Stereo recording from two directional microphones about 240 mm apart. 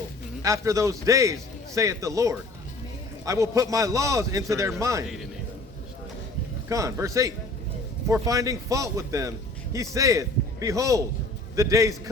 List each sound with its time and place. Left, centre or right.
0.4 s a man's voice: centre
6.7 s a man's voice: centre